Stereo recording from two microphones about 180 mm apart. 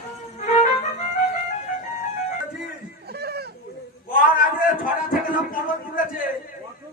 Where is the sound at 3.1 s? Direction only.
60° right (ahead or behind).